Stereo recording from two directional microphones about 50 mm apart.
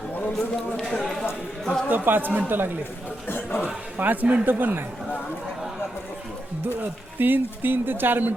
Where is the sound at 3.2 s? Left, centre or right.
Left.